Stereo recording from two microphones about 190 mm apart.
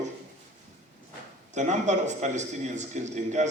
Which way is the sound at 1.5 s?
40° right (ahead or behind).